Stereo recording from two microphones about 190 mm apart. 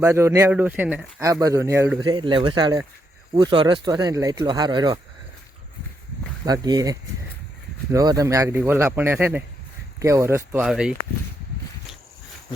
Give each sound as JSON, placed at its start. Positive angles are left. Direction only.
{"t": 0.0, "sound": "speech", "side_deg": -10}
{"t": 6.4, "sound": "speech", "side_deg": -20}
{"t": 7.9, "sound": "speech", "side_deg": -20}